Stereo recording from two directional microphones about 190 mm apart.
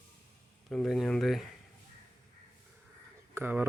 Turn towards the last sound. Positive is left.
turn(degrees=-10)  # may be behind; listen again after turning